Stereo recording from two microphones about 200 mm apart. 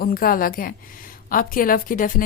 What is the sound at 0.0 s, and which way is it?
A woman's voice, 45° left (ahead or behind).